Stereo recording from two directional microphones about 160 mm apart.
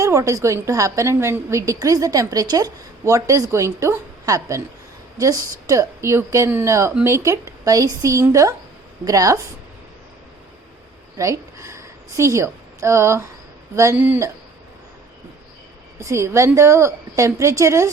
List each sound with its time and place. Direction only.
0.0 s a woman's voice: 20° right (ahead or behind)
11.2 s a woman's voice: 20° right (ahead or behind)
16.0 s a woman's voice: 20° right (ahead or behind)